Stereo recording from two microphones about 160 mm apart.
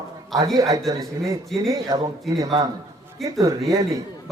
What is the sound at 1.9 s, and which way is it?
Speech, 20° right (ahead or behind).